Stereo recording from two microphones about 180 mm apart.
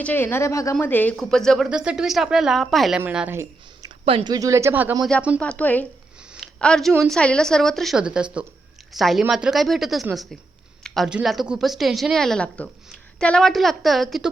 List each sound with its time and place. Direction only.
0.0 s a woman's voice: 10° left (ahead or behind); by 3.4 s 10° right (ahead or behind)
3.8 s speech: 30° right (ahead or behind); by 4.9 s 10° right (ahead or behind)
5.4 s a woman's voice: 5° left (ahead or behind)
6.3 s a sound: 5° left (ahead or behind)
7.0 s a woman's voice: 5° left (ahead or behind)